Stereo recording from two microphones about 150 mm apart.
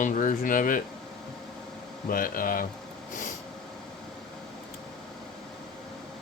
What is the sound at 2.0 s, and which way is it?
Speech, 70° left (ahead or behind).